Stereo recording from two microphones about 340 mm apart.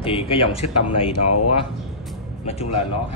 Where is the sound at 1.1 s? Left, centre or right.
Left.